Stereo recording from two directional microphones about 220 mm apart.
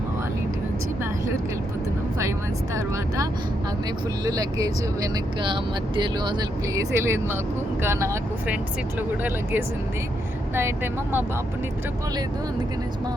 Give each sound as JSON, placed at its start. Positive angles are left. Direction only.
{"t": 4.3, "sound": "speech", "side_deg": -15}